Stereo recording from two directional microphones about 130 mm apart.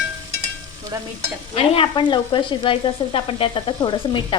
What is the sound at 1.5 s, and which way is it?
Stir, 45° left (ahead or behind).